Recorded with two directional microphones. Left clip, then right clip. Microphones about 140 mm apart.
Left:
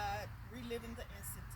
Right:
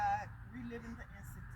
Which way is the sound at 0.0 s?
25° left (ahead or behind).